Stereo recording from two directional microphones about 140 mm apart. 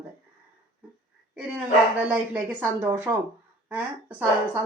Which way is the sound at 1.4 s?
10° right (ahead or behind).